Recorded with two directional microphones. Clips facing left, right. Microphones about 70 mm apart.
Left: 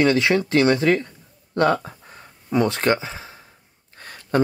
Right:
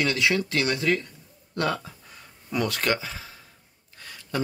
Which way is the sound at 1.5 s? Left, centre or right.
Left.